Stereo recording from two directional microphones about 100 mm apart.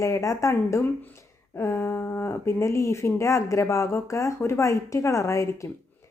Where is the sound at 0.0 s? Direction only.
30° left (ahead or behind).